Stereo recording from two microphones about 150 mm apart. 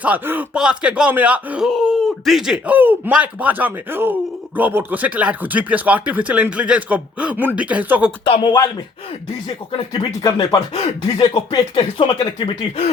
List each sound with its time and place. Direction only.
0.0 s speech: 10° right (ahead or behind)
8.2 s speech: 30° left (ahead or behind)
9.7 s speech: 30° left (ahead or behind)